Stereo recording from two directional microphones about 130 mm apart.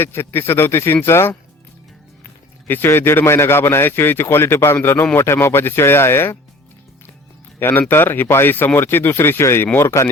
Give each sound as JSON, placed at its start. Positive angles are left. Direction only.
{"t": 0.0, "sound": "a man's voice", "side_deg": 15}
{"t": 2.6, "sound": "a man's voice", "side_deg": 15}
{"t": 7.6, "sound": "a man's voice", "side_deg": 15}